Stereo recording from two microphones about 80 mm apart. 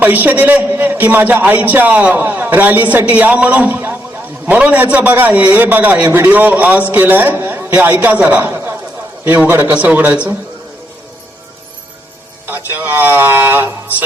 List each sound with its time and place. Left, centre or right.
0.0 s a man's voice: right
12.5 s a man's voice: right